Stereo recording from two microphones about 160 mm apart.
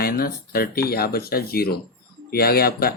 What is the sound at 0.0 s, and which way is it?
Speech, 70° left (ahead or behind).